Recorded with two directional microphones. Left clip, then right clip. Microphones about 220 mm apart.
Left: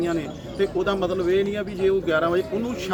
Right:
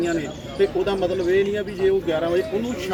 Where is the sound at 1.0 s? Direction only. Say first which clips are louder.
Right 4 dB; centre (ahead or behind).